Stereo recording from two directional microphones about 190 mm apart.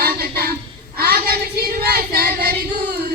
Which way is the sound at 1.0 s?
50° right (ahead or behind).